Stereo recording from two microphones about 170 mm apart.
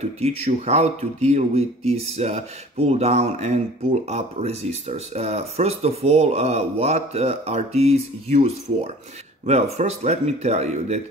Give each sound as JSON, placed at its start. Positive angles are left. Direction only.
{"t": 0.5, "sound": "speech", "side_deg": -40}